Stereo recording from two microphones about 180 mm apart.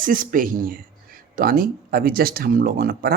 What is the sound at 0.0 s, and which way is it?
Speech, 50° right (ahead or behind).